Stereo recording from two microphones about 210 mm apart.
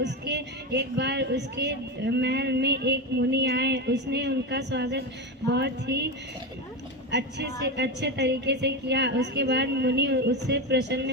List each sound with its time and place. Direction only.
0.0 s speech: 55° right (ahead or behind)
7.1 s speech: 55° right (ahead or behind)